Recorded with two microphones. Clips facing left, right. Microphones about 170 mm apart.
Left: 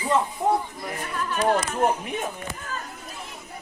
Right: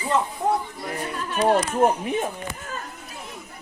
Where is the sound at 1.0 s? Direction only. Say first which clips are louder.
Right 2 dB; 25° right (ahead or behind).